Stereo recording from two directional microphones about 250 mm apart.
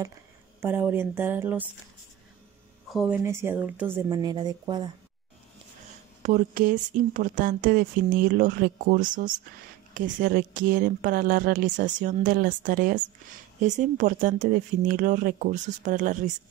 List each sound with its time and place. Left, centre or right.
0.6 s speech: centre
2.9 s speech: centre
6.2 s speech: right